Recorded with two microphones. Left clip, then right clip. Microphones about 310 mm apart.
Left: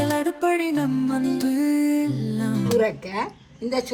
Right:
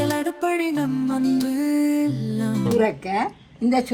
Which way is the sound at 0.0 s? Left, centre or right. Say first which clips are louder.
Left 1 dB; centre.